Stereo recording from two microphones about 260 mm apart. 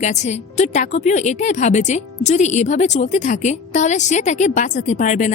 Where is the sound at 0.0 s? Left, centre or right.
Left.